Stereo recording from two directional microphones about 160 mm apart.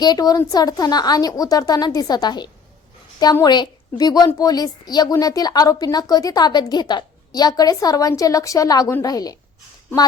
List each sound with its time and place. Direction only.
0.0 s a woman's voice: 25° left (ahead or behind)